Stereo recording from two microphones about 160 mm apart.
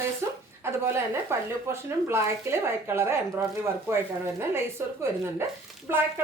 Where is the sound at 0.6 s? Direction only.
15° right (ahead or behind).